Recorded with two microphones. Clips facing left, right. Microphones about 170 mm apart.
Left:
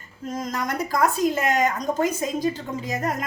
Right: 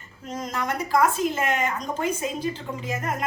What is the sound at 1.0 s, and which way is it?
A woman's voice, 40° left (ahead or behind).